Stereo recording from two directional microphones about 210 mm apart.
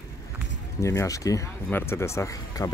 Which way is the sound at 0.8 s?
15° left (ahead or behind).